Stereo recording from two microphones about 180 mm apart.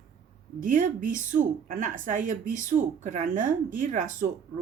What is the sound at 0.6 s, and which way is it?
A woman's voice, 50° right (ahead or behind).